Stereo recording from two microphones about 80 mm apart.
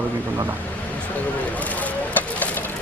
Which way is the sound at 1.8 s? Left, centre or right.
Left.